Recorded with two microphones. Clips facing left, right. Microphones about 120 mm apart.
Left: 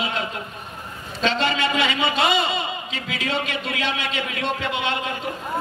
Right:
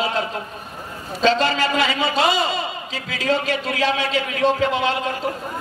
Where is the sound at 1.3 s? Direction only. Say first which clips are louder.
Right 4 dB; 35° right (ahead or behind).